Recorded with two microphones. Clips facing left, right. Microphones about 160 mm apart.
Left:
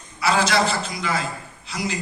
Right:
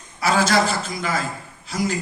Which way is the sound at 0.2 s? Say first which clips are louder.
Right 1 dB; 45° right (ahead or behind).